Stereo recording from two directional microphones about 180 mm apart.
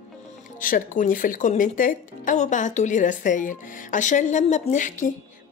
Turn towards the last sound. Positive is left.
turn(degrees=45)  # may be behind; listen again after turning